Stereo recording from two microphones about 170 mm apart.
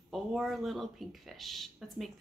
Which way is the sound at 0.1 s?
Centre (ahead or behind).